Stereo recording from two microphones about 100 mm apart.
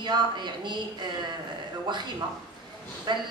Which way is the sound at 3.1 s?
45° right (ahead or behind).